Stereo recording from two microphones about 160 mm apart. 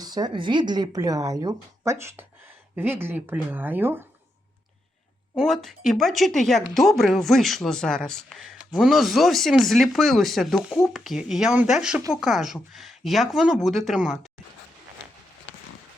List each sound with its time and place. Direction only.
0.0 s speech: 25° right (ahead or behind)
5.4 s speech: centre (ahead or behind)